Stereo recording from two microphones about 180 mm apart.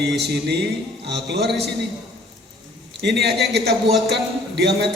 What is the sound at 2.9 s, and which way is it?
A man's voice, 65° right (ahead or behind).